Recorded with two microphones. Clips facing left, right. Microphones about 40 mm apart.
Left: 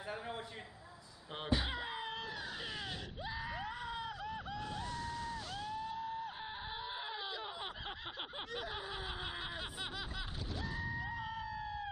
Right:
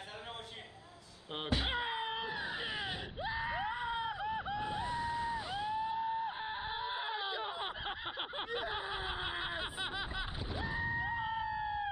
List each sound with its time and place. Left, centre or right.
1.6 s screaming: right